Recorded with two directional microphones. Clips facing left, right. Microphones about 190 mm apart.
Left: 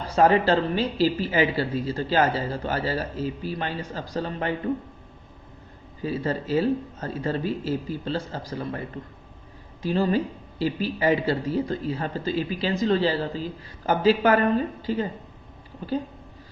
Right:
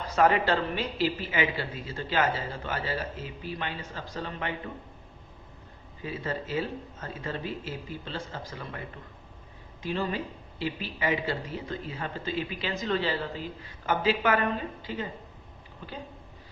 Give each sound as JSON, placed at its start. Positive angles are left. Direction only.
{"t": 0.0, "sound": "a woman's voice", "side_deg": 30}
{"t": 6.0, "sound": "a woman's voice", "side_deg": 35}
{"t": 9.8, "sound": "a woman's voice", "side_deg": 35}